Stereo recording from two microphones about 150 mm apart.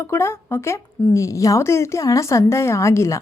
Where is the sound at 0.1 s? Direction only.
15° left (ahead or behind).